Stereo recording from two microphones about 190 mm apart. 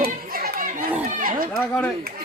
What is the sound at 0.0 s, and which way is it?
Chatter, 50° right (ahead or behind).